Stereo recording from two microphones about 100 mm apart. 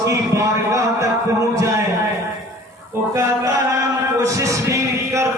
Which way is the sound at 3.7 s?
30° right (ahead or behind).